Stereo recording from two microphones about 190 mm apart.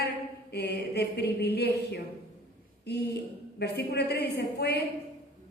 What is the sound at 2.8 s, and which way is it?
Speech, 60° left (ahead or behind).